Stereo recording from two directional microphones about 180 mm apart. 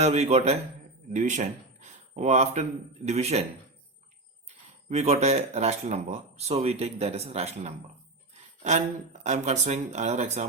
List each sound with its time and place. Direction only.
0.0 s a man's voice: 35° right (ahead or behind)
4.9 s speech: 40° right (ahead or behind)
9.2 s speech: 40° right (ahead or behind)